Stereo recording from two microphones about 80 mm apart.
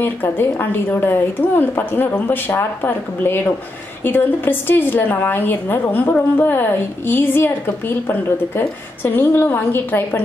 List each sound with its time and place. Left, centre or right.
0.0 s a woman's voice: left